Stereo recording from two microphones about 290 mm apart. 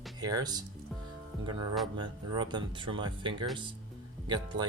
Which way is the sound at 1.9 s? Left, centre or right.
Centre.